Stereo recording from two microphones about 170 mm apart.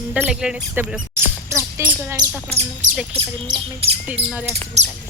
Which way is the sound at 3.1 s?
30° right (ahead or behind).